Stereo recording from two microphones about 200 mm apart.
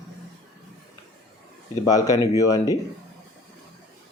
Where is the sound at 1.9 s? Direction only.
15° left (ahead or behind).